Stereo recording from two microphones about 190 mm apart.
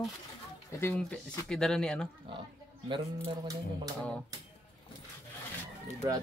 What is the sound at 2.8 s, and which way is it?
Speech, 25° right (ahead or behind).